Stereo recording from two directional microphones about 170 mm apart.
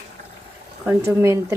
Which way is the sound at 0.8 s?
15° right (ahead or behind).